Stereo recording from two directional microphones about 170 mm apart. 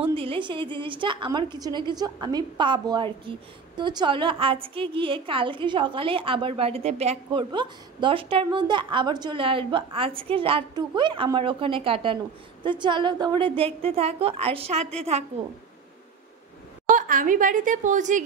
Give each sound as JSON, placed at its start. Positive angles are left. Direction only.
{"t": 0.0, "sound": "a woman's voice", "side_deg": -30}
{"t": 16.9, "sound": "a woman's voice", "side_deg": -50}